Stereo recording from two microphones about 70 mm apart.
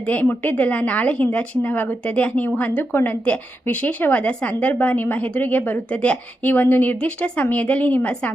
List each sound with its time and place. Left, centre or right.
0.0 s a woman's voice: left